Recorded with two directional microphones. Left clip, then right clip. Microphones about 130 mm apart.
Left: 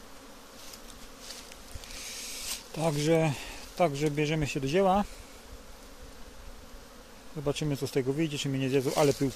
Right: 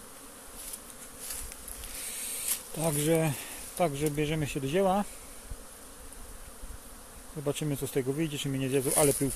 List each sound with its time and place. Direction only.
2.7 s speech: 20° left (ahead or behind)
7.4 s speech: 15° left (ahead or behind)